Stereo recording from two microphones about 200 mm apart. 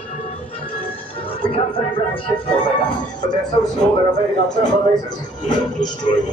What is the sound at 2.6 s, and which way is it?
Speech, 20° left (ahead or behind).